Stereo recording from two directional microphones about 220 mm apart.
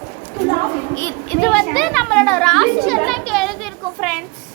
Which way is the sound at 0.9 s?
10° left (ahead or behind).